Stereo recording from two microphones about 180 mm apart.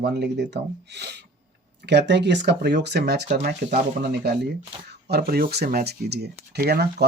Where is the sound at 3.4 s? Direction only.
55° right (ahead or behind).